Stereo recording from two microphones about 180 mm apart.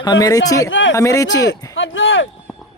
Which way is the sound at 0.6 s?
90° left.